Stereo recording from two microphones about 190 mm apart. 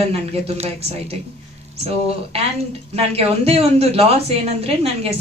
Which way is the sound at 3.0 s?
30° right (ahead or behind).